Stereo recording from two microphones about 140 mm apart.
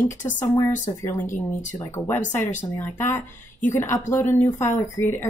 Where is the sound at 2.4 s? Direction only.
60° left (ahead or behind).